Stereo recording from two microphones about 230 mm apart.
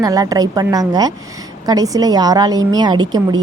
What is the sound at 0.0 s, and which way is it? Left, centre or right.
A woman's voice, centre.